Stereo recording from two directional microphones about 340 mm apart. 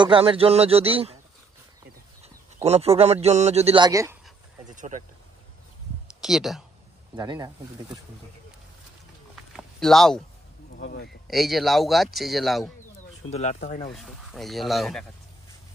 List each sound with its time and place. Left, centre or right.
0.0 s speech: centre
2.2 s a man's voice: centre
4.6 s speech: right
6.2 s a man's voice: centre
7.2 s speech: centre
9.3 s a sound: centre
10.8 s a man's voice: left
11.2 s a man's voice: centre
13.3 s speech: centre
13.9 s a man's voice: centre